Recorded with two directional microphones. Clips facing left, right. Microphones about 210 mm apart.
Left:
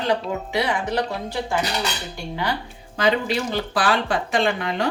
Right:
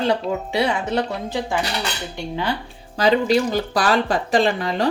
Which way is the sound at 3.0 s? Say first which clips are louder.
Right 4 dB; 40° right (ahead or behind).